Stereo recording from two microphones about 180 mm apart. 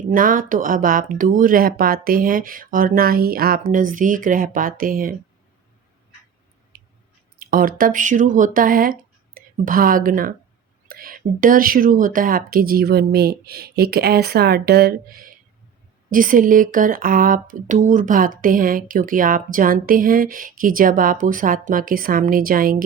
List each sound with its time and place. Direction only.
0.1 s speech: 50° right (ahead or behind)
6.7 s a sound: 50° right (ahead or behind)
7.3 s speech: 50° right (ahead or behind)